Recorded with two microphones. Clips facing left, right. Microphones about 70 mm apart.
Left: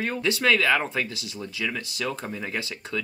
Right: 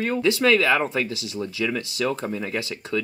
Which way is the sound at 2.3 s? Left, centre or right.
Centre.